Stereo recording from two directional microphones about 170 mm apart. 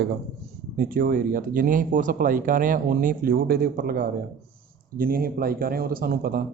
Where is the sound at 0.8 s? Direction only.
55° right (ahead or behind).